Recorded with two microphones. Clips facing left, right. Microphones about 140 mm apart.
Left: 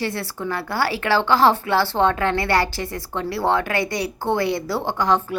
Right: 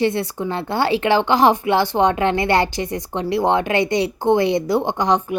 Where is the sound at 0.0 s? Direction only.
20° right (ahead or behind).